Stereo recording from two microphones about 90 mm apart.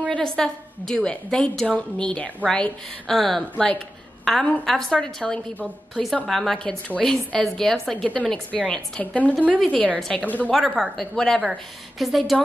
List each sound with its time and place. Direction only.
0.1 s a woman's voice: 5° left (ahead or behind)
4.2 s a sound: 5° left (ahead or behind)
4.6 s a woman's voice: 5° left (ahead or behind)
10.2 s a woman's voice: 20° left (ahead or behind)
10.8 s a woman's voice: 5° left (ahead or behind)